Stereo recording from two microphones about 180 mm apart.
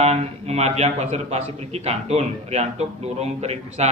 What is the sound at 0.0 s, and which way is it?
A man's voice, 35° right (ahead or behind).